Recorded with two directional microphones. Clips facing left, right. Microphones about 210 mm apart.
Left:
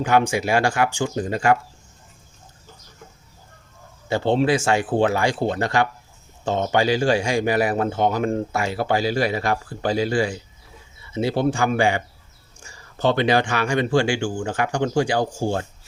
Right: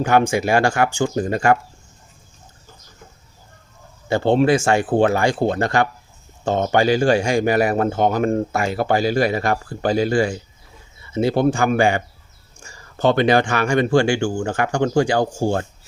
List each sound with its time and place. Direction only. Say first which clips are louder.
0.0 s speech: right 2 dB; 50° right (ahead or behind)
4.1 s speech: right 3 dB; 50° right (ahead or behind)